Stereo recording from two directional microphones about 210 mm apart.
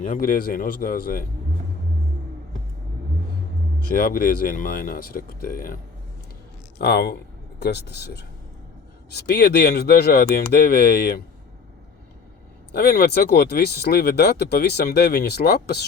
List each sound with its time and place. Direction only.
0.0 s speech: 40° left (ahead or behind)
3.9 s speech: 45° left (ahead or behind)
6.7 s speech: 50° left (ahead or behind)
12.7 s speech: 50° left (ahead or behind)